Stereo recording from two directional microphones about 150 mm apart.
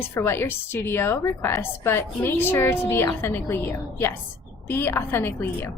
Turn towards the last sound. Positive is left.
turn(degrees=15)  # may be behind; listen again after turning